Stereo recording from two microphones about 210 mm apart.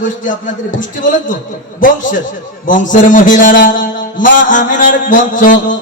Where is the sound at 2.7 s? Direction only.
40° left (ahead or behind).